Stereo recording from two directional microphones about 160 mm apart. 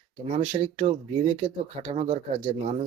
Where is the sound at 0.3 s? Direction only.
45° right (ahead or behind).